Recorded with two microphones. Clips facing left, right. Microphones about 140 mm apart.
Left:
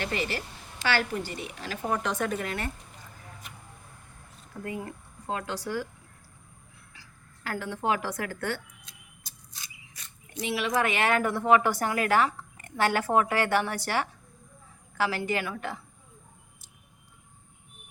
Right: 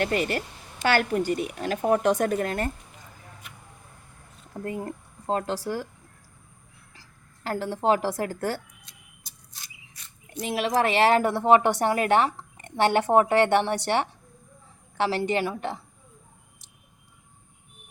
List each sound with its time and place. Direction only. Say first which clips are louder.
0.0 s speech: right 6 dB; 50° right (ahead or behind)
4.6 s speech: right 4 dB; 40° right (ahead or behind)
7.4 s speech: right 5 dB; 35° right (ahead or behind)
10.4 s a woman's voice: right 3 dB; 40° right (ahead or behind)